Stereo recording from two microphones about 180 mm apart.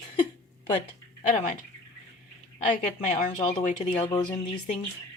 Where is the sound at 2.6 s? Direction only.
45° left (ahead or behind).